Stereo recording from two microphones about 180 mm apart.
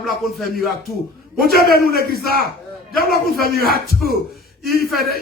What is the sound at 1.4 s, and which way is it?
Speech, 55° left (ahead or behind).